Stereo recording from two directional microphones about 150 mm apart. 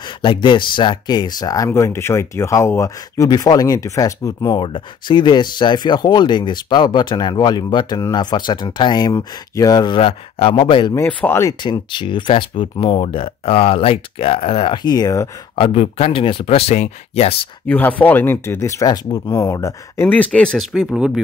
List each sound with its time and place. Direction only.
0.0 s speech: 30° left (ahead or behind)
4.6 s speech: 35° left (ahead or behind)
11.2 s speech: 15° left (ahead or behind)
11.6 s speech: 30° left (ahead or behind)
17.6 s speech: 10° left (ahead or behind)